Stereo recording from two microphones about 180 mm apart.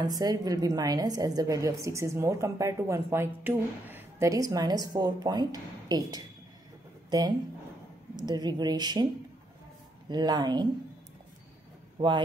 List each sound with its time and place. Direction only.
0.0 s a woman's voice: 20° right (ahead or behind)
10.0 s a woman's voice: 25° right (ahead or behind)